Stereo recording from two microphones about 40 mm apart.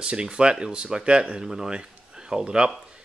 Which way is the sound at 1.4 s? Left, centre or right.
Centre.